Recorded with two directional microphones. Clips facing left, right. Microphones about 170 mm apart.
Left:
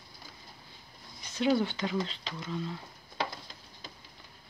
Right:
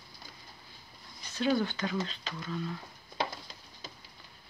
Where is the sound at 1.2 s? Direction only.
20° left (ahead or behind).